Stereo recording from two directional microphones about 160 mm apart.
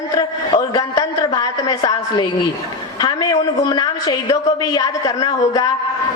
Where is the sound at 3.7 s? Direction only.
25° left (ahead or behind).